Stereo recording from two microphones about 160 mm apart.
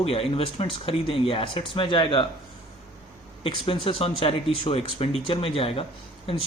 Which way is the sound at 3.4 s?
35° left (ahead or behind).